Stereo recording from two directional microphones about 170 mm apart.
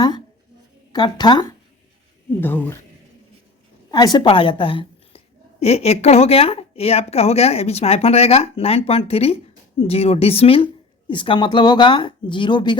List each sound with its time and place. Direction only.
0.9 s speech: 25° left (ahead or behind)
2.4 s speech: 10° left (ahead or behind)
3.9 s a woman's voice: 25° left (ahead or behind)